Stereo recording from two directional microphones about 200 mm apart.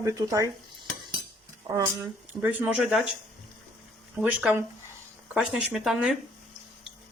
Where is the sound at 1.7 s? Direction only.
15° right (ahead or behind).